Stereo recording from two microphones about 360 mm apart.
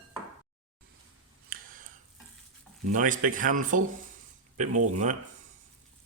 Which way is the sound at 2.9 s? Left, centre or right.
Right.